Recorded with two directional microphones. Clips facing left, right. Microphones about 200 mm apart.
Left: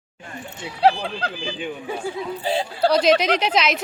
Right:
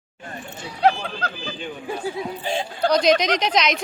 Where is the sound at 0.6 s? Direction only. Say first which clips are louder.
Left 1 dB; 30° left (ahead or behind).